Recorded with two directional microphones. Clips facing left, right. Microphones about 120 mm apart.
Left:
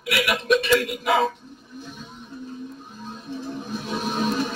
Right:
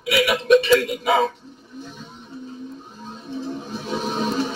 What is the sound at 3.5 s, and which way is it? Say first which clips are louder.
Music: right 1 dB; centre (ahead or behind).